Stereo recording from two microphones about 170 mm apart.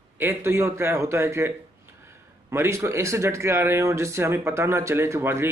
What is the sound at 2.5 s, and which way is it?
Speech, 15° right (ahead or behind).